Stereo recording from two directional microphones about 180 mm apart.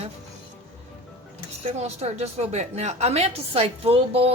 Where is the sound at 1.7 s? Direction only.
35° right (ahead or behind).